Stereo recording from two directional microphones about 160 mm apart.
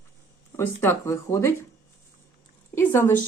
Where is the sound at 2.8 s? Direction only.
15° left (ahead or behind).